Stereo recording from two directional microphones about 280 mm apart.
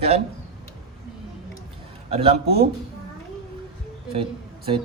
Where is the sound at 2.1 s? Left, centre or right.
Right.